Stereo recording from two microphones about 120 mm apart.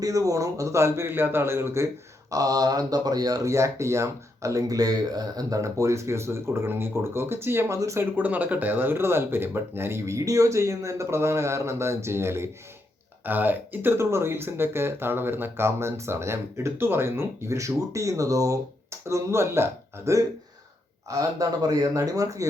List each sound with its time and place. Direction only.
0.0 s speech: 30° right (ahead or behind)
8.1 s speech: 15° right (ahead or behind)